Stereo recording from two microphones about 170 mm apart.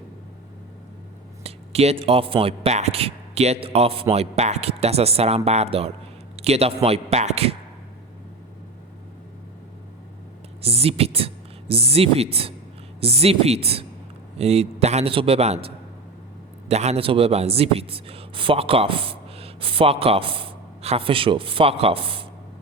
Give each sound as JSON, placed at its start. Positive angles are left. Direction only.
{"t": 1.5, "sound": "a man's voice", "side_deg": -35}
{"t": 10.6, "sound": "speech", "side_deg": -35}